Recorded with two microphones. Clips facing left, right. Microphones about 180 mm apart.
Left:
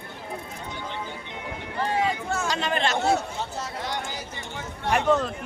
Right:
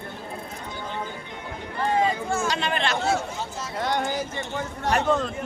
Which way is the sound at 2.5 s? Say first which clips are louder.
Even; 40° left (ahead or behind).